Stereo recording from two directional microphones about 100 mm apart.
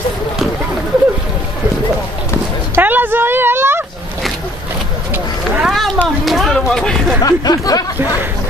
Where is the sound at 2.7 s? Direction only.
20° right (ahead or behind).